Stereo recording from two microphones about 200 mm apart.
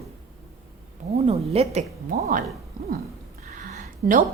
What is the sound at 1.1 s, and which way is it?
A woman's voice, 30° right (ahead or behind).